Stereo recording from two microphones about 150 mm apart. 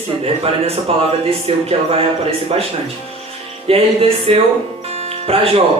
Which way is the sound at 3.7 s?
40° right (ahead or behind).